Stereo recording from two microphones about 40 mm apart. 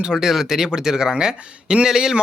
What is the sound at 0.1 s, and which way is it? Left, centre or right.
Speech, centre.